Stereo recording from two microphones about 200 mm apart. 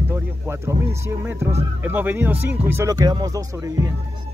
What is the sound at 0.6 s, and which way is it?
Speech, 15° right (ahead or behind).